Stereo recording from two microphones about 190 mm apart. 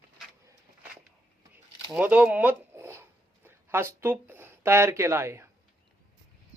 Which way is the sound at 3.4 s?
15° right (ahead or behind).